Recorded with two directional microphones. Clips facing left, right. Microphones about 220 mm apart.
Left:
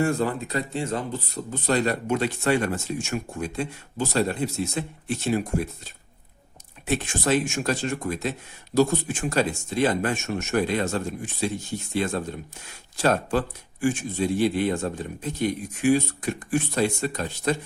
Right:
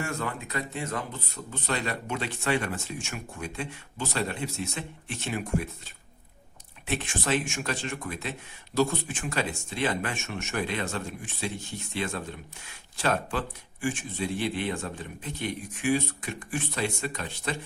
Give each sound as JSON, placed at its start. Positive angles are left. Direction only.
{"t": 0.0, "sound": "speech", "side_deg": 35}
{"t": 6.8, "sound": "speech", "side_deg": 40}